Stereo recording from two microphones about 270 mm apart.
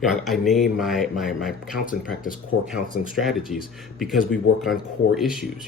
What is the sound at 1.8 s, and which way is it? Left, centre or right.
Speech, left.